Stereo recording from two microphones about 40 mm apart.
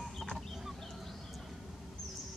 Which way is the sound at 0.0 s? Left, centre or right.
Centre.